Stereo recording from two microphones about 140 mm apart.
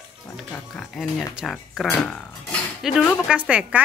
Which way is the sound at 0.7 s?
5° left (ahead or behind).